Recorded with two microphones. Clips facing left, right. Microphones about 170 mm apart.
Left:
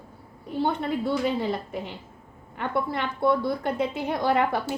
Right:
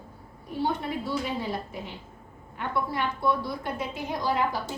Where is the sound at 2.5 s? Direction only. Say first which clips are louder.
Left 2 dB; 65° left (ahead or behind).